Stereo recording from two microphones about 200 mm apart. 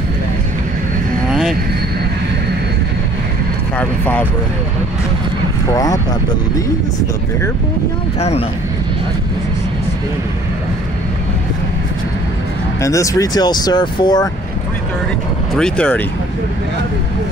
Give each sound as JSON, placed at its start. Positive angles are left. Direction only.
{"t": 3.7, "sound": "speech", "side_deg": 10}
{"t": 5.7, "sound": "speech", "side_deg": 20}
{"t": 8.2, "sound": "speech", "side_deg": 30}
{"t": 12.8, "sound": "speech", "side_deg": 15}
{"t": 15.5, "sound": "speech", "side_deg": 5}